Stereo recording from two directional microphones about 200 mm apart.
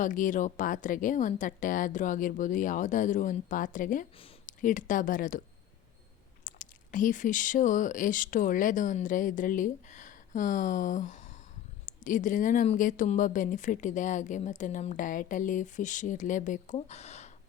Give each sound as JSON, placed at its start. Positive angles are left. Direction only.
{"t": 0.0, "sound": "speech", "side_deg": 40}
{"t": 6.4, "sound": "speech", "side_deg": 40}